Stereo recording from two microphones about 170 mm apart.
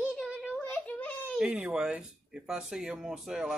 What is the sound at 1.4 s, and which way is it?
Speech, 5° right (ahead or behind).